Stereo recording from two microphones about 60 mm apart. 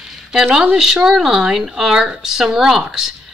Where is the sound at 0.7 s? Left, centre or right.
Centre.